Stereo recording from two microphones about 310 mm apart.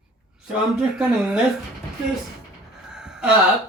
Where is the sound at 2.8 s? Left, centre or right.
Centre.